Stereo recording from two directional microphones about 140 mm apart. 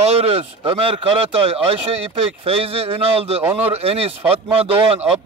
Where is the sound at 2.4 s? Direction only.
45° right (ahead or behind).